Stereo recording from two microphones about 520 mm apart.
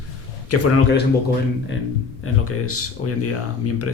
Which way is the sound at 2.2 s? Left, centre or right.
Left.